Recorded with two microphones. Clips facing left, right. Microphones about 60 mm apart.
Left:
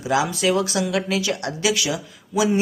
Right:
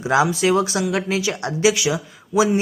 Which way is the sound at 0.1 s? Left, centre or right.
Right.